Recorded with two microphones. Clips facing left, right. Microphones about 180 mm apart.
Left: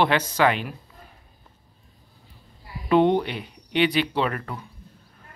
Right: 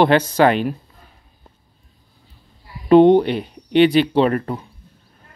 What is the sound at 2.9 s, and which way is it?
Speech, 30° right (ahead or behind).